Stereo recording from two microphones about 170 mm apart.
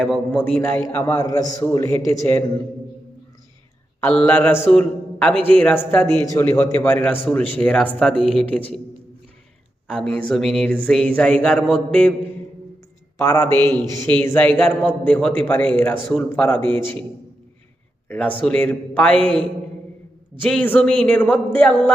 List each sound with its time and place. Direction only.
0.0 s a man's voice: 5° left (ahead or behind)
4.0 s a man's voice: 10° left (ahead or behind)
9.8 s speech: 5° left (ahead or behind)
13.1 s a man's voice: 15° left (ahead or behind)
16.6 s a man's voice: 30° right (ahead or behind)
18.1 s a man's voice: 10° left (ahead or behind)